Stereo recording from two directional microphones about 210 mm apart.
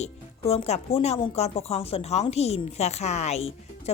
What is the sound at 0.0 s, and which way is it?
A woman's voice, 30° left (ahead or behind).